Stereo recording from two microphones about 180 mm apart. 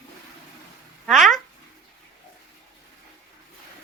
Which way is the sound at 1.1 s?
Centre (ahead or behind).